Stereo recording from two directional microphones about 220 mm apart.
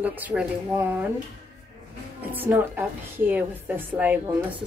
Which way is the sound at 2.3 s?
10° right (ahead or behind).